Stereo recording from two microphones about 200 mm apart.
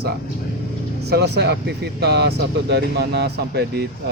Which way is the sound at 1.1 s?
55° right (ahead or behind).